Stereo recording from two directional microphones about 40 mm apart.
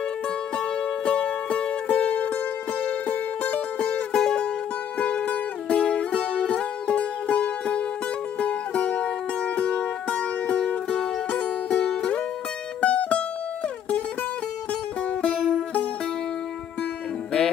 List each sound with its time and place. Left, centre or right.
0.6 s music: left
4.9 s music: left
11.8 s music: left
14.7 s music: left